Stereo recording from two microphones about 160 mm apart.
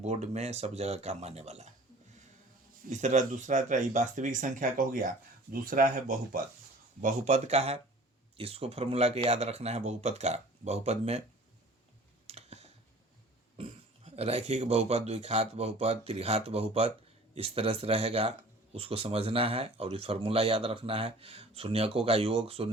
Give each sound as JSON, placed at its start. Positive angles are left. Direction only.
{"t": 0.0, "sound": "speech", "side_deg": -45}
{"t": 2.9, "sound": "speech", "side_deg": -50}
{"t": 7.0, "sound": "speech", "side_deg": -45}
{"t": 12.3, "sound": "typing", "side_deg": -40}
{"t": 13.6, "sound": "speech", "side_deg": -40}